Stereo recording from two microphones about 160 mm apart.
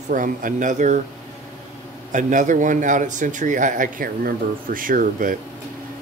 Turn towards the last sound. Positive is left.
turn(degrees=-60)  # may be behind; listen again after turning